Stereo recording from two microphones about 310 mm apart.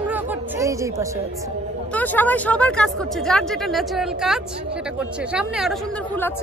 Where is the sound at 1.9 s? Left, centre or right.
Centre.